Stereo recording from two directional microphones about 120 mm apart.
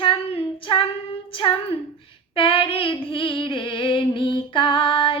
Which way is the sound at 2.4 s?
50° left (ahead or behind).